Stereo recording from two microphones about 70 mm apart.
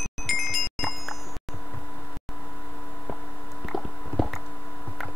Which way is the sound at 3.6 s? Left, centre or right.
Centre.